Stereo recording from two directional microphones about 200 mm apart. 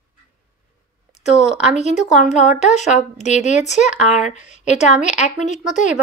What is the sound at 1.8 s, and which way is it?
Speech, 35° left (ahead or behind).